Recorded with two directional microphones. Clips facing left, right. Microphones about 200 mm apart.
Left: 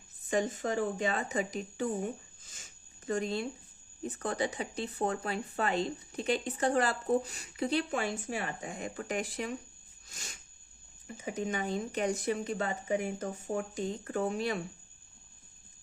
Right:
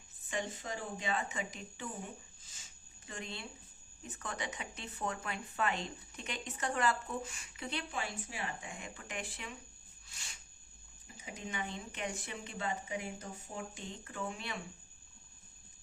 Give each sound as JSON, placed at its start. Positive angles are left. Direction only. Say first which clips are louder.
{"t": 0.3, "sound": "speech", "louder": "left 9 dB", "side_deg": 45}
{"t": 3.1, "sound": "speech", "louder": "left 13 dB", "side_deg": 40}
{"t": 10.1, "sound": "a sound", "louder": "left 7 dB", "side_deg": 45}
{"t": 11.3, "sound": "speech", "louder": "left 9 dB", "side_deg": 45}